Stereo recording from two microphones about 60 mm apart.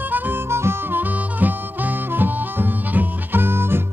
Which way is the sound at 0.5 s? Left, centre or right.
Right.